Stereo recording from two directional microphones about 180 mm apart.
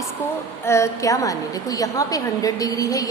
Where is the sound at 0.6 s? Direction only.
15° left (ahead or behind).